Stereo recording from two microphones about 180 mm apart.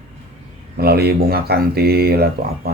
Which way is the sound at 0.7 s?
60° right (ahead or behind).